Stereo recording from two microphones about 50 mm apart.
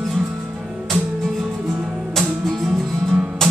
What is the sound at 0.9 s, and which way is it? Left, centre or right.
Music, centre.